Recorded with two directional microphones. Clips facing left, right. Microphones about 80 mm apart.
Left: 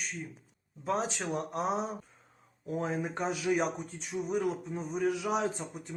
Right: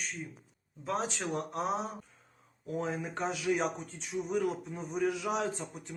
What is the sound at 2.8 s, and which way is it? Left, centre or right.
Speech, centre.